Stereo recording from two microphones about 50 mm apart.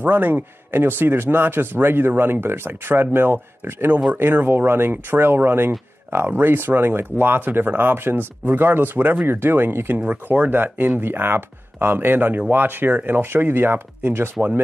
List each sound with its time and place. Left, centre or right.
0.0 s speech: right